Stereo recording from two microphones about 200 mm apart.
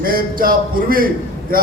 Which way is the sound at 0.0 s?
45° right (ahead or behind).